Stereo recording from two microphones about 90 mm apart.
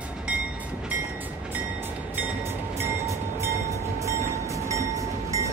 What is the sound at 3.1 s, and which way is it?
Train, 35° right (ahead or behind).